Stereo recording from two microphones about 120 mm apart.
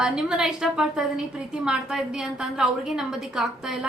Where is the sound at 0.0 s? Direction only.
5° right (ahead or behind).